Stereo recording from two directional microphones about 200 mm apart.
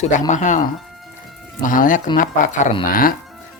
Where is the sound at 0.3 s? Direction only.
35° left (ahead or behind).